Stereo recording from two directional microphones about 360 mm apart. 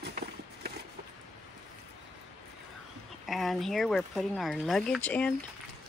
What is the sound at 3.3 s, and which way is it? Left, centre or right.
Speech, centre.